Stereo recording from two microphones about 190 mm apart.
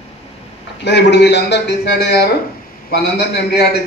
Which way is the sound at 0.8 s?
65° left (ahead or behind).